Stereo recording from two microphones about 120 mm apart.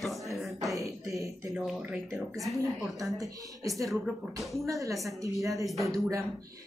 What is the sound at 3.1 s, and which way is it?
Speech, 30° right (ahead or behind).